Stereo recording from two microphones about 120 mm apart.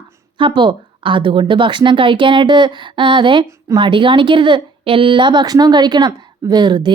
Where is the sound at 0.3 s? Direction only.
45° right (ahead or behind).